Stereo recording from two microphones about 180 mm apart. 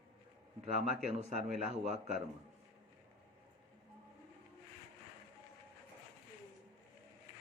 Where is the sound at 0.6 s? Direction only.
40° right (ahead or behind).